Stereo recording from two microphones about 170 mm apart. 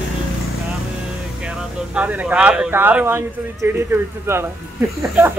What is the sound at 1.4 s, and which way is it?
Speech, 5° right (ahead or behind).